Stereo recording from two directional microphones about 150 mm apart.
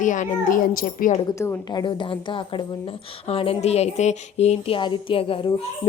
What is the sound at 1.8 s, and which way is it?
A child's voice, 35° left (ahead or behind).